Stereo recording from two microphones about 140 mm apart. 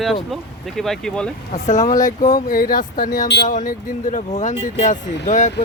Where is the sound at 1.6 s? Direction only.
60° left (ahead or behind).